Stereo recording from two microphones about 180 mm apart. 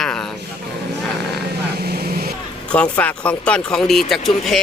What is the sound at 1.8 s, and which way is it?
Vehicle, 60° right (ahead or behind).